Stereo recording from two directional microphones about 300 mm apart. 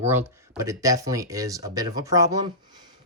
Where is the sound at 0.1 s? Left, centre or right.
Centre.